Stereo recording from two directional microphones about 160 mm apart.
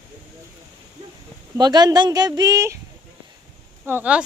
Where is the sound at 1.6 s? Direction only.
25° right (ahead or behind).